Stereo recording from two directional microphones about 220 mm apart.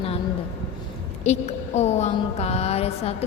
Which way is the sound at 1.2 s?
30° left (ahead or behind).